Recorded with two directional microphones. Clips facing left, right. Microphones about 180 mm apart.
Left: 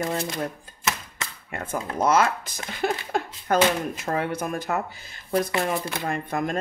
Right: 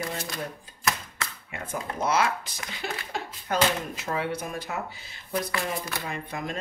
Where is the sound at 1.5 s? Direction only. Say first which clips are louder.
Left 5 dB; 50° left (ahead or behind).